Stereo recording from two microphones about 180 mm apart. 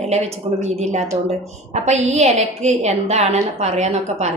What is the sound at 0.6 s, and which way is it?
A woman's voice, 40° right (ahead or behind).